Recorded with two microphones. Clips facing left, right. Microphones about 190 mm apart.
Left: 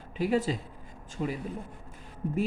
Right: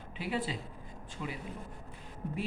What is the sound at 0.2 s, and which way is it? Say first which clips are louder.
Speech: left 8 dB; 45° left (ahead or behind).